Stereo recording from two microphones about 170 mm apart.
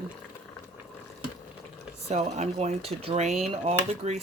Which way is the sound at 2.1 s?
40° right (ahead or behind).